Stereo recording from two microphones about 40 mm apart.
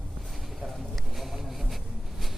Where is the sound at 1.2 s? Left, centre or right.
Centre.